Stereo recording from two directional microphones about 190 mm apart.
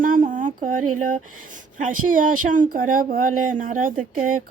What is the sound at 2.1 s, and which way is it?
Speech, 45° right (ahead or behind).